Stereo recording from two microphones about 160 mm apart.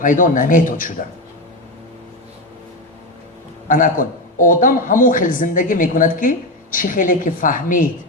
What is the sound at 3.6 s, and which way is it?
A man's voice, 55° left (ahead or behind).